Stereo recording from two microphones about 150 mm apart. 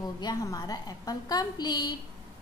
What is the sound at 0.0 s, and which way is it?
A woman's voice, 25° left (ahead or behind).